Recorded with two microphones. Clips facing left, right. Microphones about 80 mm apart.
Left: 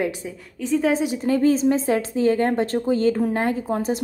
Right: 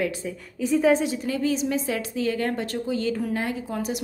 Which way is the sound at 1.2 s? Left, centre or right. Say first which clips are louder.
Left 7 dB; left.